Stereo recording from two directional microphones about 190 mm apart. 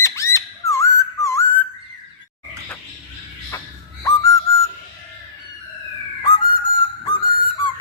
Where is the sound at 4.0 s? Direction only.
15° left (ahead or behind).